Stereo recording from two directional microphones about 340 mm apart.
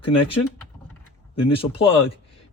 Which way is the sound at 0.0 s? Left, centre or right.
Centre.